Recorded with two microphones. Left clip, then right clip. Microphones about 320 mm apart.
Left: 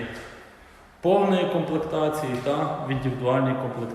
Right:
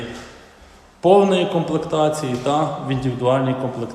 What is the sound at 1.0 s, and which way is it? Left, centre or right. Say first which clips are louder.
A man's voice: right 7 dB; centre.